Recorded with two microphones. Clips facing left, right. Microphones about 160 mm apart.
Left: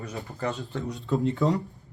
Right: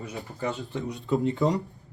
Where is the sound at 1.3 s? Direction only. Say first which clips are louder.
Even; 20° right (ahead or behind).